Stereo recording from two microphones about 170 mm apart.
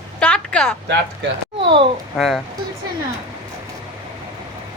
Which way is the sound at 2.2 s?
Centre (ahead or behind).